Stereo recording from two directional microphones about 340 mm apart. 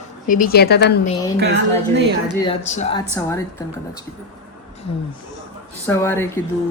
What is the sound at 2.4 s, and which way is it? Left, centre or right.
Speech, centre.